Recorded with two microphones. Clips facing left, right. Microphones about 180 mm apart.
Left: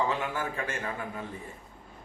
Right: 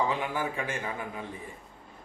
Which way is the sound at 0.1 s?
15° right (ahead or behind).